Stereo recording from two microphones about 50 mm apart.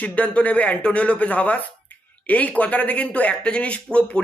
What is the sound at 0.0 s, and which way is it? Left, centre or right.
A man's voice, left.